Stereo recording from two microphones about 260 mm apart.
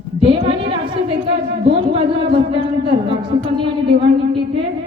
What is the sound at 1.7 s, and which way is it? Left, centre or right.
Speech, right.